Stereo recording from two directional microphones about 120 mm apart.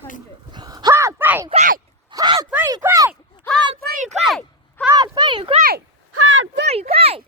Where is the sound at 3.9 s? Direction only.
80° right.